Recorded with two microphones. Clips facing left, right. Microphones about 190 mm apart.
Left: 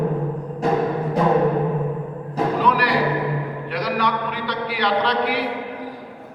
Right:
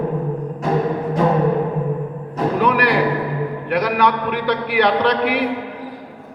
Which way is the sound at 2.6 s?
60° right (ahead or behind).